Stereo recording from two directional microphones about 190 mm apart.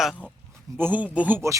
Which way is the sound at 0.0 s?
5° left (ahead or behind).